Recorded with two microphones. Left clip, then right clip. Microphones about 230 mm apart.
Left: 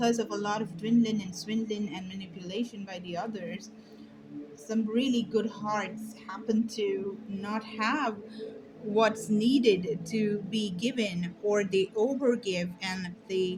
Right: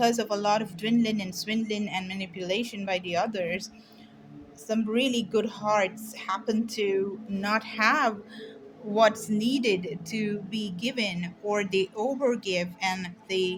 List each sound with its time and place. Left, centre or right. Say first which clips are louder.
0.0 s a woman's voice: right 4 dB; right
4.7 s a woman's voice: right 3 dB; right